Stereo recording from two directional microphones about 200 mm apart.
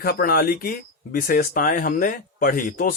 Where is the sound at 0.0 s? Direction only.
50° left (ahead or behind).